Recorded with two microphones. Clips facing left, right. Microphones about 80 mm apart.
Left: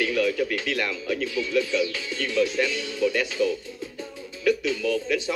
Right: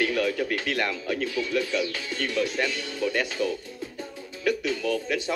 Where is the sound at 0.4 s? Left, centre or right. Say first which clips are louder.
Left 1 dB; right.